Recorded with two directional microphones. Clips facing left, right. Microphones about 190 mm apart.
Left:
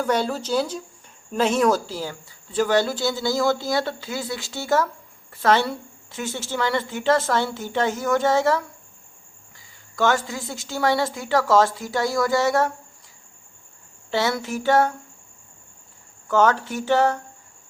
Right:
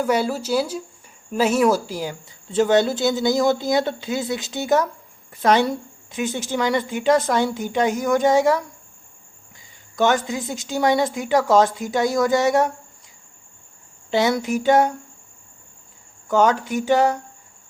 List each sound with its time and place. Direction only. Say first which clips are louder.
0.0 s a woman's voice: right 2 dB; 10° right (ahead or behind)
9.9 s a woman's voice: right 2 dB; 20° right (ahead or behind)
14.1 s a woman's voice: right 4 dB; 15° right (ahead or behind)
16.3 s a woman's voice: right 2 dB; 15° right (ahead or behind)